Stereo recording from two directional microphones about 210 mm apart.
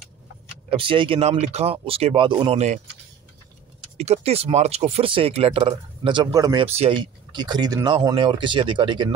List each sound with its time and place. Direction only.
0.7 s speech: 25° right (ahead or behind)
4.0 s speech: 30° right (ahead or behind)